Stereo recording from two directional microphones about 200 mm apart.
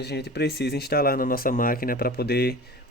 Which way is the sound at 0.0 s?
55° left (ahead or behind).